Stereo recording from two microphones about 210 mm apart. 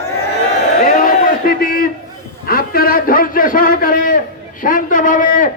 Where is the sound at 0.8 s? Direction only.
40° left (ahead or behind).